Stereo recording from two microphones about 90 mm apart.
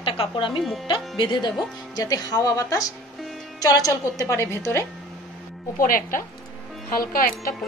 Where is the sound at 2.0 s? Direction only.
45° left (ahead or behind).